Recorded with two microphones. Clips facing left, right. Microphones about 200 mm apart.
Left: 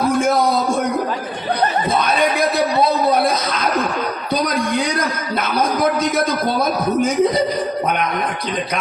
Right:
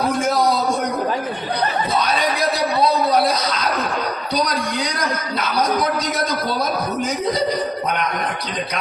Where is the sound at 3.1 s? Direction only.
55° left (ahead or behind).